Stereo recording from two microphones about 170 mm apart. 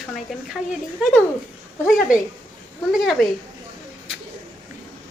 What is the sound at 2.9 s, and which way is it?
Speech, centre (ahead or behind).